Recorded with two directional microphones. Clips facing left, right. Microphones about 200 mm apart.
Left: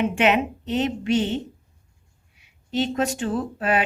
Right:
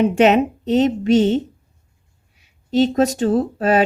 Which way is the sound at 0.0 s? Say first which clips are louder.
Right 7 dB; 40° right (ahead or behind).